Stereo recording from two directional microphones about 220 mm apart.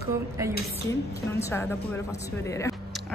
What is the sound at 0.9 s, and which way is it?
A woman's voice, 15° left (ahead or behind).